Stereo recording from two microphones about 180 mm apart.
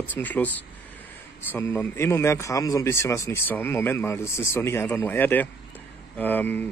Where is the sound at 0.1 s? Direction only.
10° left (ahead or behind).